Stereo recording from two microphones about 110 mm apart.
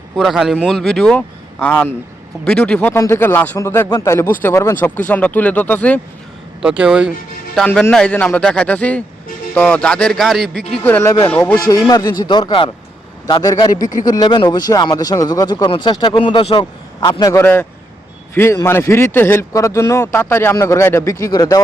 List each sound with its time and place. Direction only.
0.2 s a man's voice: centre (ahead or behind)
2.9 s speech: 20° left (ahead or behind)
6.6 s speech: 10° right (ahead or behind)
7.7 s speech: 10° left (ahead or behind)
11.5 s speech: 35° left (ahead or behind); by 16.6 s 55° left (ahead or behind)
16.6 s a man's voice: 40° left (ahead or behind)
17.4 s speech: 20° left (ahead or behind); by 21.6 s 35° left (ahead or behind)